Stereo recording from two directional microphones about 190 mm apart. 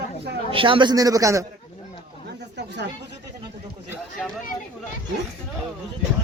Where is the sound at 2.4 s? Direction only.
65° right (ahead or behind).